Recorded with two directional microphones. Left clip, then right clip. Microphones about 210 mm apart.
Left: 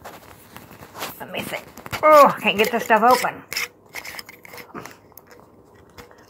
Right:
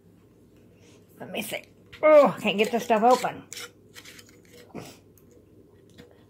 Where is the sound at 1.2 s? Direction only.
15° right (ahead or behind).